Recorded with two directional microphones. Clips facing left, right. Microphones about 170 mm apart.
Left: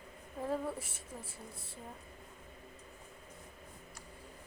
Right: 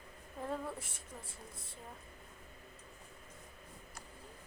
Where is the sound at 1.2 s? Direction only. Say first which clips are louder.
Left 3 dB; 30° left (ahead or behind).